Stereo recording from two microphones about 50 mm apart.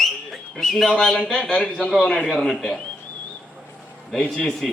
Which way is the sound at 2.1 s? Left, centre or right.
Centre.